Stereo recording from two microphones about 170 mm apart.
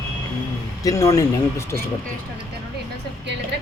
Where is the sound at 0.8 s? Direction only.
20° left (ahead or behind).